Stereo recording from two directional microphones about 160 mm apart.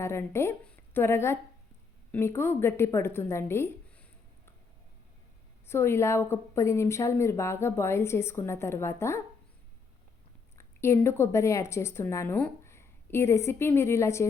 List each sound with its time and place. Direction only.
0.0 s a woman's voice: 15° left (ahead or behind)
5.6 s a woman's voice: 15° left (ahead or behind)
10.6 s a woman's voice: 15° left (ahead or behind)